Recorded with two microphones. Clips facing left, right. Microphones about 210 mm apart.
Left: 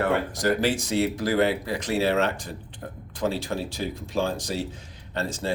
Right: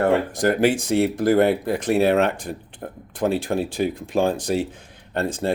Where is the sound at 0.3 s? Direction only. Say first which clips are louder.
Right 5 dB; 55° right (ahead or behind).